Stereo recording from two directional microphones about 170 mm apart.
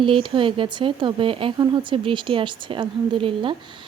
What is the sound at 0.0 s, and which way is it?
A woman's voice, 30° right (ahead or behind).